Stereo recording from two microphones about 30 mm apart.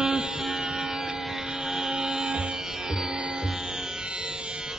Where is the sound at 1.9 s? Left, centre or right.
Right.